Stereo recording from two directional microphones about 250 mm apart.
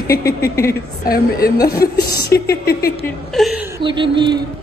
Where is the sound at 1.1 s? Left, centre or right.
Left.